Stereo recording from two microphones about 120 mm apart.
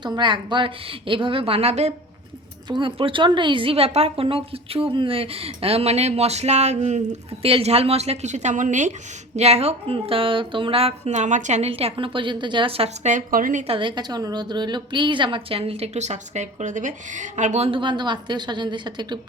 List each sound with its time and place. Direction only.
0.0 s a woman's voice: 40° right (ahead or behind); by 1.9 s 60° right (ahead or behind)
2.6 s a woman's voice: 40° right (ahead or behind); by 8.9 s 90° right
9.3 s a woman's voice: 65° right (ahead or behind); by 11.7 s 80° right
11.7 s a woman's voice: 50° right (ahead or behind)
13.1 s speech: 90° right
13.7 s a woman's voice: 45° right (ahead or behind); by 17.7 s 80° right
17.7 s speech: 40° right (ahead or behind)